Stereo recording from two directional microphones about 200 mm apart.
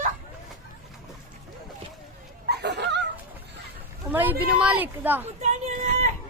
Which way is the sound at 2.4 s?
55° right (ahead or behind).